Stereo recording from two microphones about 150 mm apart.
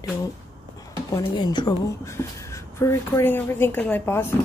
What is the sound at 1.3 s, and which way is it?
Speech, 30° left (ahead or behind).